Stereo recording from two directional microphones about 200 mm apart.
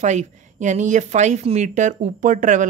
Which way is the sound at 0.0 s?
35° right (ahead or behind).